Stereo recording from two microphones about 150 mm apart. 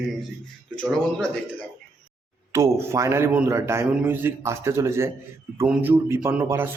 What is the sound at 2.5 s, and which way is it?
A man's voice, 20° right (ahead or behind).